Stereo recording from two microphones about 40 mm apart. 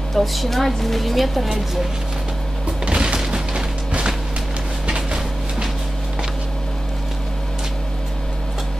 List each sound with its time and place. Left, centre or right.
0.1 s a woman's voice: centre
2.8 s music: right
4.8 s a sound: right